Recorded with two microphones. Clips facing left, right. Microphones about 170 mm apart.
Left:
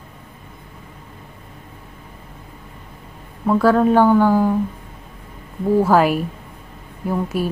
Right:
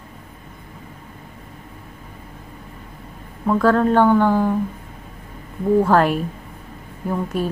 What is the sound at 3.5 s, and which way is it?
A woman's voice, 5° left (ahead or behind).